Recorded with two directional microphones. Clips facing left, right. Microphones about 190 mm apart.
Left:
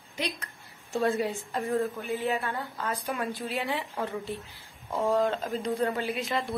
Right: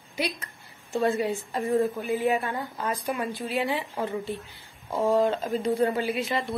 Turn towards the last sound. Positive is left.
turn(degrees=0)  # may be behind; listen again after turning